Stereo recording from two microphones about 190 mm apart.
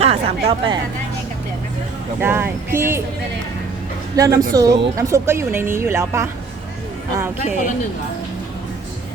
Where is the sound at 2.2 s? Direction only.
10° right (ahead or behind).